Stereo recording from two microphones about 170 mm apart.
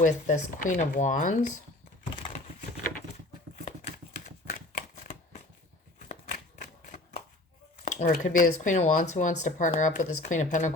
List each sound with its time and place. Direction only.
0.0 s speech: 50° left (ahead or behind)
4.4 s shuffling cards: 50° left (ahead or behind)
6.6 s a sound: 45° left (ahead or behind)
7.9 s speech: 45° left (ahead or behind)